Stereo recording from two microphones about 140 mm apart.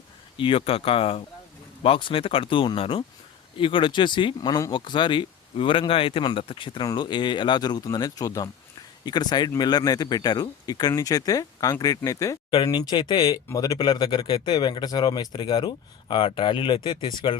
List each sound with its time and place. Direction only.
0.3 s speech: 40° left (ahead or behind); by 12.4 s 25° left (ahead or behind)
12.5 s speech: 35° left (ahead or behind)